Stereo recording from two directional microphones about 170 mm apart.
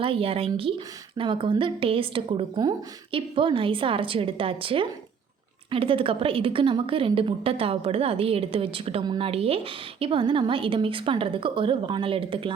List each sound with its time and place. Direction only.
0.0 s a woman's voice: 30° right (ahead or behind)